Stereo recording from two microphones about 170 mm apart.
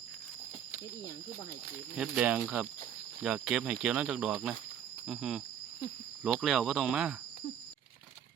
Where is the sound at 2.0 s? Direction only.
5° right (ahead or behind).